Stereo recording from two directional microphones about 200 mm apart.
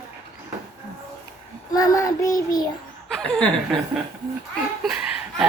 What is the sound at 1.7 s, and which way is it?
Child singing, 15° left (ahead or behind).